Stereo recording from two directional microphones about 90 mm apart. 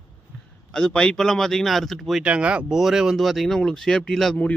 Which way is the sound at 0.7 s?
10° left (ahead or behind).